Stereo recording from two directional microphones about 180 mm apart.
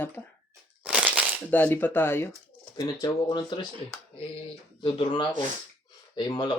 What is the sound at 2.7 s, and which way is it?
Speech, 25° left (ahead or behind).